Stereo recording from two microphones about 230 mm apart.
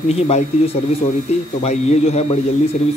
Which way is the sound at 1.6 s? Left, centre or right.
Left.